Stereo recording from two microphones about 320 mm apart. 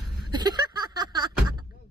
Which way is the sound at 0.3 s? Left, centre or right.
Centre.